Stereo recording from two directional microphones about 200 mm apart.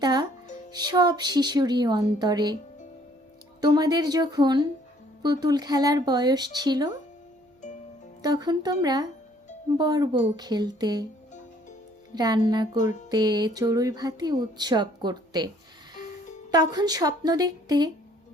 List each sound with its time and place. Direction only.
0.0 s music: 20° right (ahead or behind)
0.7 s speech: 20° right (ahead or behind)
3.6 s speech: 20° right (ahead or behind)
8.2 s speech: 20° right (ahead or behind)
12.1 s speech: 20° right (ahead or behind)
16.5 s speech: 20° right (ahead or behind)